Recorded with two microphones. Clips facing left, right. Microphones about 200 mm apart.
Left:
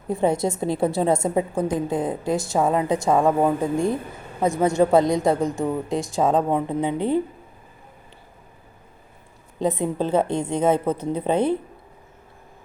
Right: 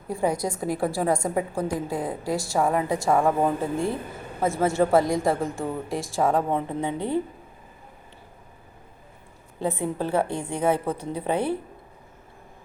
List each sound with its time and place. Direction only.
0.1 s a woman's voice: 25° left (ahead or behind)
9.6 s a woman's voice: 15° left (ahead or behind)